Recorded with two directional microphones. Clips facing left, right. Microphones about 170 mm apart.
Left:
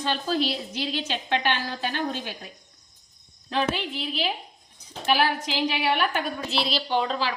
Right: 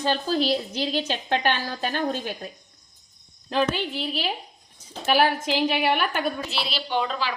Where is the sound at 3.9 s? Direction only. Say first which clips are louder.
Right 1 dB; 40° right (ahead or behind).